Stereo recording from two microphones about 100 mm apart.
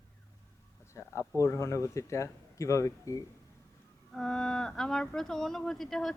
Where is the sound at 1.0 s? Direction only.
30° left (ahead or behind).